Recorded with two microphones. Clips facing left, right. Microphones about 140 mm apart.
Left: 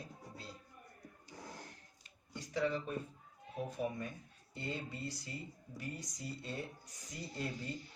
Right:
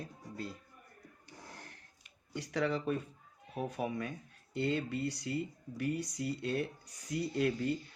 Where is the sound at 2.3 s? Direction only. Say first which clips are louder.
Right 3 dB; 75° right (ahead or behind).